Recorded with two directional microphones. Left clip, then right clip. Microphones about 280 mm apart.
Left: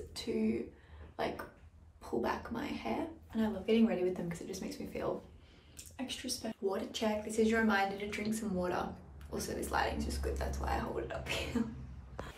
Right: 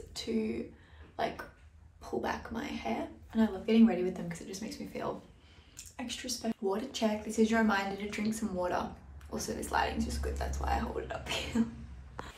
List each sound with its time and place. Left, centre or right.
0.1 s speech: centre
5.8 s speech: centre